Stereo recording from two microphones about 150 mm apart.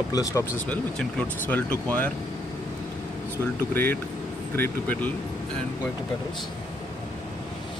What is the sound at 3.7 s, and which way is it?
Speech, 15° left (ahead or behind).